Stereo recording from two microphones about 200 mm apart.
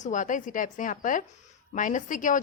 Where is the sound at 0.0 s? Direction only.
40° left (ahead or behind).